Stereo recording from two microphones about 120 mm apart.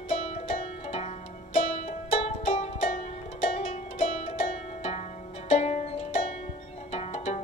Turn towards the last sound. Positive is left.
turn(degrees=65)  # may be behind; listen again after turning